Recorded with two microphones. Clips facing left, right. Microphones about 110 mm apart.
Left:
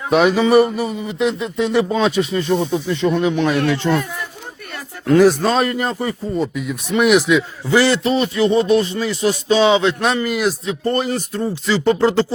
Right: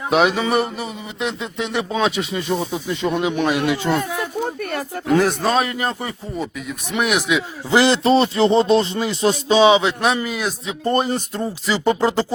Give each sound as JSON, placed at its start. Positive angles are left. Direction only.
{"t": 0.1, "sound": "a man's voice", "side_deg": 0}
{"t": 4.2, "sound": "a sound", "side_deg": -50}
{"t": 5.0, "sound": "a man's voice", "side_deg": 0}
{"t": 7.7, "sound": "speech", "side_deg": -15}
{"t": 8.0, "sound": "music", "side_deg": -30}
{"t": 10.2, "sound": "a man's voice", "side_deg": 0}
{"t": 10.8, "sound": "music", "side_deg": -20}
{"t": 11.7, "sound": "speech", "side_deg": -15}